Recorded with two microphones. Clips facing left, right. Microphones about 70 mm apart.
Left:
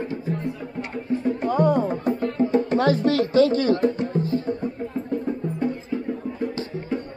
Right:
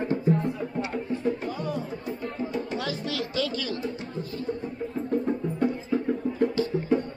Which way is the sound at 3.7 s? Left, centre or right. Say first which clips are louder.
Left 10 dB; left.